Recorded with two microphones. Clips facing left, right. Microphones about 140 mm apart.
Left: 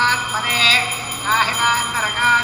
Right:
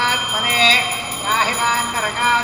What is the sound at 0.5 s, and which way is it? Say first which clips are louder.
Speech: right 6 dB; 40° right (ahead or behind).